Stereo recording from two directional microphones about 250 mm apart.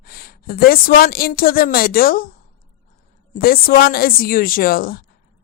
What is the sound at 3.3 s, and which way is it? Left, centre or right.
A woman's voice, left.